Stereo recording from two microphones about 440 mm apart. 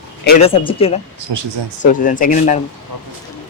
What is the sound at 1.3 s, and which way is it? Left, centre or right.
Speech, right.